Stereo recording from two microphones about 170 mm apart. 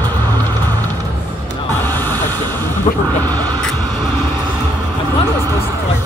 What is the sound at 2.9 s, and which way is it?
Speech, 40° left (ahead or behind).